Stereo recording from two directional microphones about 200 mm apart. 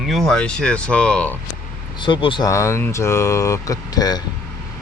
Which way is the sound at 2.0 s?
25° left (ahead or behind).